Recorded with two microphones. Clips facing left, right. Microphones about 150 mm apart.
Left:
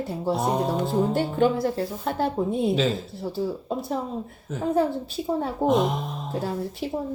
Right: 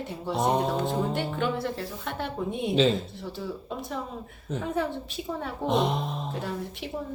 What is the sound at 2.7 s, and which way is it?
Speech, 5° left (ahead or behind).